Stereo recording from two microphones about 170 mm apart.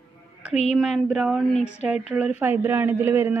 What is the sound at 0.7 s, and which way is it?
A woman's voice, centre (ahead or behind).